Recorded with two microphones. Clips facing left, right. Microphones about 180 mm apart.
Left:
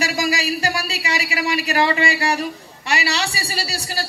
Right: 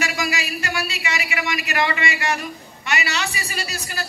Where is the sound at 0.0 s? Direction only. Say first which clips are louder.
Left 4 dB; 35° left (ahead or behind).